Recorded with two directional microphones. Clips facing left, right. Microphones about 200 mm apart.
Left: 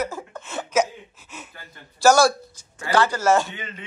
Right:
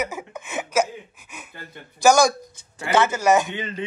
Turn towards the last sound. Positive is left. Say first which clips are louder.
# right 1 dB
turn(degrees=-15)  # may be behind; listen again after turning